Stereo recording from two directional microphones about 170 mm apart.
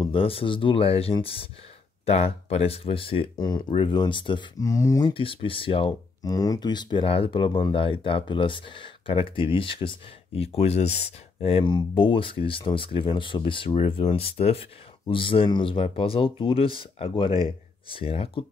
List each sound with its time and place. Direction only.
0.0 s speech: 30° left (ahead or behind)
5.1 s speech: 30° left (ahead or behind)
6.2 s speech: 20° left (ahead or behind)